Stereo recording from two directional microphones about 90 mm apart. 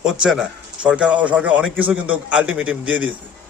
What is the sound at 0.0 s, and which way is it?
Speech, 5° right (ahead or behind).